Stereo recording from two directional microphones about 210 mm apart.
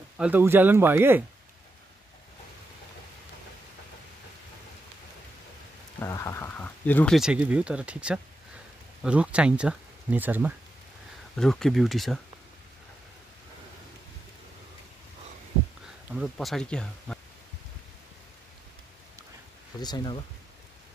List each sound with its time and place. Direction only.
0.2 s speech: 10° right (ahead or behind)
5.9 s speech: 15° left (ahead or behind)
7.2 s speech: 5° right (ahead or behind)
11.3 s speech: centre (ahead or behind)
16.2 s speech: centre (ahead or behind)
19.8 s speech: 20° left (ahead or behind)